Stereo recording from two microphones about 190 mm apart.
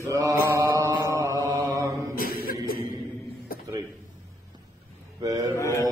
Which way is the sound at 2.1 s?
50° left (ahead or behind).